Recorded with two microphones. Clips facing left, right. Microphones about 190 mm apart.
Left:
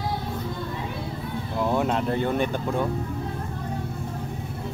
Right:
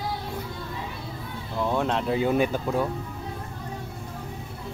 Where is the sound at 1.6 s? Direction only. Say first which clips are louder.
Left 1 dB; 10° left (ahead or behind).